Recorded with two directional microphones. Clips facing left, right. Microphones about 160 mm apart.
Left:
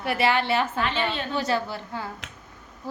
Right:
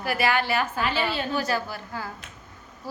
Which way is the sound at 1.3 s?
25° left (ahead or behind).